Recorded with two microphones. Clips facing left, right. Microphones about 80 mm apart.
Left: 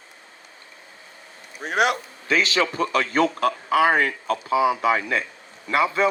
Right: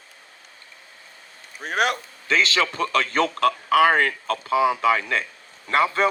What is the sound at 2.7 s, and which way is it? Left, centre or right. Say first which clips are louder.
Speech: left 1 dB; right.